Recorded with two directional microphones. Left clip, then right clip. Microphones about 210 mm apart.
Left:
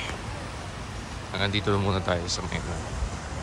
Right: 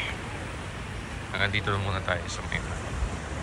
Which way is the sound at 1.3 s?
25° left (ahead or behind).